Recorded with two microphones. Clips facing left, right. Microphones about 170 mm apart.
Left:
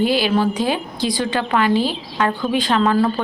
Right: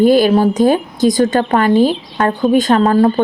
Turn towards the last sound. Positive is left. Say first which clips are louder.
# right 6 dB
turn(degrees=-45)  # may be behind; listen again after turning